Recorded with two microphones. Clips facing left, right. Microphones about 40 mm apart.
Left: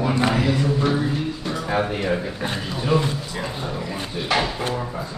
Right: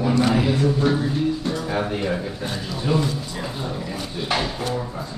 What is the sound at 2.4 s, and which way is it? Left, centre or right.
Speech, left.